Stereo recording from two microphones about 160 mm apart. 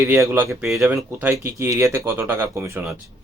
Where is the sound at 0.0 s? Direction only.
15° right (ahead or behind).